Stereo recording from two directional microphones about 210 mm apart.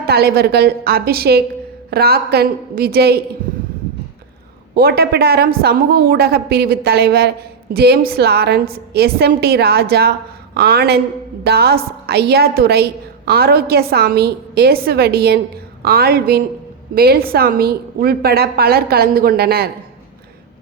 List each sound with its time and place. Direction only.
0.1 s a woman's voice: 50° right (ahead or behind)
4.7 s a woman's voice: 50° right (ahead or behind)